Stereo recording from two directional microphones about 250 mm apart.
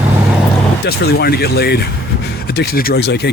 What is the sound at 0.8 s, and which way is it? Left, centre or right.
Speech, left.